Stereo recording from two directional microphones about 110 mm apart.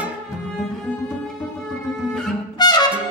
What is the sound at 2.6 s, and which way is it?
Trumpet, 40° left (ahead or behind).